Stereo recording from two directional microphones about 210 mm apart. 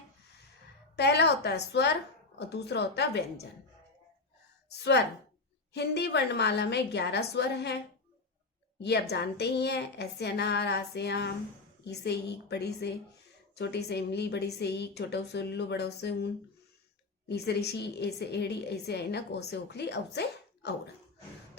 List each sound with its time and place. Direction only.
0.9 s a woman's voice: 50° left (ahead or behind)
4.8 s a woman's voice: 50° left (ahead or behind)